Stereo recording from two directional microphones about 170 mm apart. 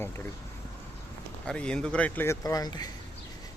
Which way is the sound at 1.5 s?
5° left (ahead or behind).